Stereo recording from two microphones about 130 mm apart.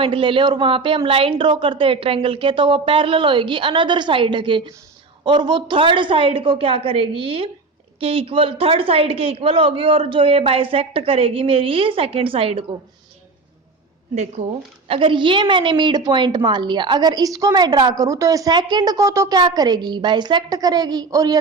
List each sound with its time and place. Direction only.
0.0 s a woman's voice: 40° right (ahead or behind)
14.8 s a woman's voice: 40° right (ahead or behind)